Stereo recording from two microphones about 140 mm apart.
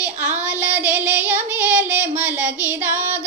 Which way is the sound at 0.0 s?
10° right (ahead or behind).